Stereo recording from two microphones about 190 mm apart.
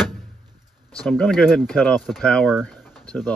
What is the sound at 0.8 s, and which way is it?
Speech, 5° left (ahead or behind).